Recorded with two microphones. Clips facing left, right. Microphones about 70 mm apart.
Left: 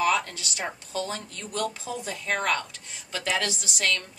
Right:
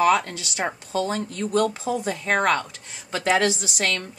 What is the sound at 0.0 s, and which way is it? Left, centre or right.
Speech, right.